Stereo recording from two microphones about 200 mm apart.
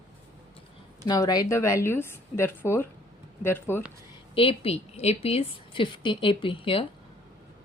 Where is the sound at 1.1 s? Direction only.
20° left (ahead or behind).